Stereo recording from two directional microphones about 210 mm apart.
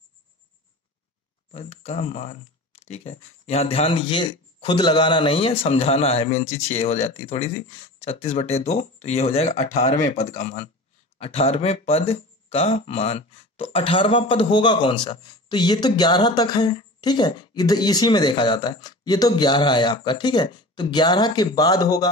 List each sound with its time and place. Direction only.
1.5 s speech: 30° left (ahead or behind)